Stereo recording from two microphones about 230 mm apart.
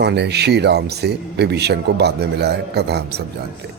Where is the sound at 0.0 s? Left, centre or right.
Right.